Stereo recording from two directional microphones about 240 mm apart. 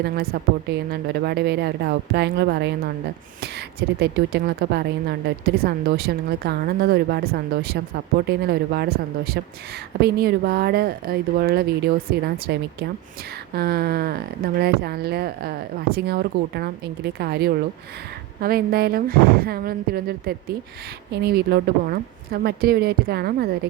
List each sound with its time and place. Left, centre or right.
0.7 s a woman's voice: right